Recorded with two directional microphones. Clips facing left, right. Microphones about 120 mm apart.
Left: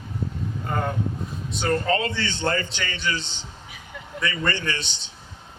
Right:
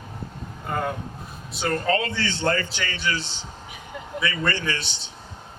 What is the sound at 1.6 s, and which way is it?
A man's voice, 20° left (ahead or behind).